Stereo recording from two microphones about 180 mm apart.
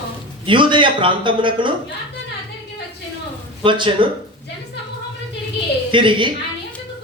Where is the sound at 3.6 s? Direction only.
30° right (ahead or behind).